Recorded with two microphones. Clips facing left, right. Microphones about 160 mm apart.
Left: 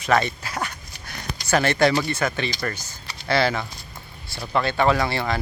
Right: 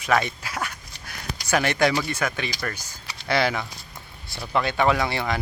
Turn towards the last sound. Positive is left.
turn(degrees=-15)  # may be behind; listen again after turning